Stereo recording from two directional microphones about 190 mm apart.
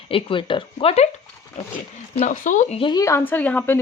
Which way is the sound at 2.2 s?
40° left (ahead or behind).